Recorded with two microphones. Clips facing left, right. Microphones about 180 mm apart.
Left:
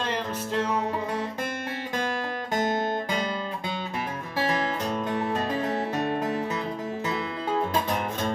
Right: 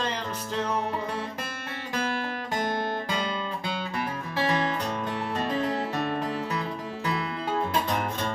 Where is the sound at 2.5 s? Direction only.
20° left (ahead or behind).